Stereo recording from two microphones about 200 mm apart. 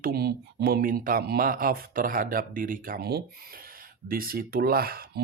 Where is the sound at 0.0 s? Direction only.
50° right (ahead or behind).